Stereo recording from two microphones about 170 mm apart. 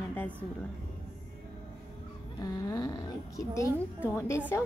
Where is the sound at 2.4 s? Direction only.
20° left (ahead or behind).